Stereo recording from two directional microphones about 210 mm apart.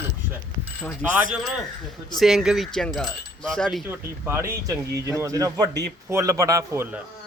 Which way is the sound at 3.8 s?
10° right (ahead or behind).